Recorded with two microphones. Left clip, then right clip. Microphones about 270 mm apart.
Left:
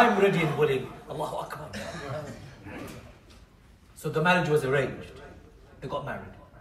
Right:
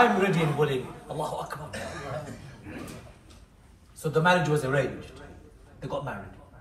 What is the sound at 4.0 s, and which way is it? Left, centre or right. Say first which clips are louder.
Speech: right 2 dB; centre.